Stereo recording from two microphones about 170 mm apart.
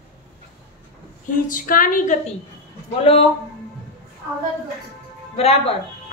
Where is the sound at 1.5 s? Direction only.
55° left (ahead or behind).